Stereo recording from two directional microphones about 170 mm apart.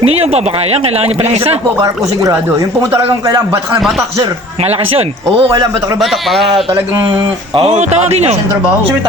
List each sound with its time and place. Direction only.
0.0 s speech: 35° right (ahead or behind)
1.8 s a man's voice: 20° right (ahead or behind)
4.6 s speech: 35° right (ahead or behind)
6.0 s speech: centre (ahead or behind)
6.7 s a man's voice: 20° right (ahead or behind)
7.5 s speech: 40° right (ahead or behind)